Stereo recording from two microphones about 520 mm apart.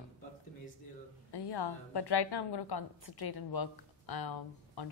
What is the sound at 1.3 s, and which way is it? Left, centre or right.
A woman's voice, left.